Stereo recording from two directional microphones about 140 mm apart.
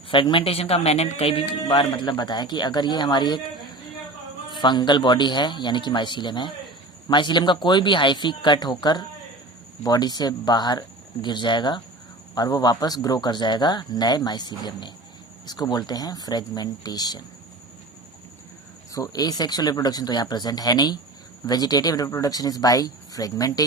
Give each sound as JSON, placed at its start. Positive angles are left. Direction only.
{"t": 0.1, "sound": "speech", "side_deg": 35}
{"t": 4.5, "sound": "speech", "side_deg": 35}
{"t": 18.9, "sound": "speech", "side_deg": 25}